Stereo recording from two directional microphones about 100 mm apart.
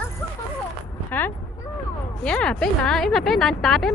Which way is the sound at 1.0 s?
20° left (ahead or behind).